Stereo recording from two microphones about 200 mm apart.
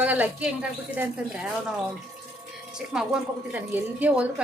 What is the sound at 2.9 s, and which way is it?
A woman's voice, 5° right (ahead or behind).